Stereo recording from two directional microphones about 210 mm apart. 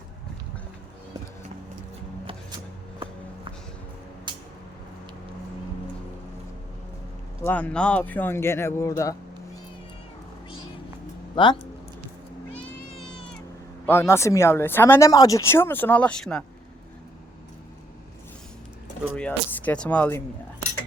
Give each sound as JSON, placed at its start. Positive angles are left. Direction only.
{"t": 4.3, "sound": "a sound", "side_deg": -20}
{"t": 7.4, "sound": "speech", "side_deg": 5}
{"t": 11.3, "sound": "speech", "side_deg": 20}
{"t": 12.5, "sound": "cat", "side_deg": 5}
{"t": 13.8, "sound": "speech", "side_deg": 10}
{"t": 19.1, "sound": "speech", "side_deg": 5}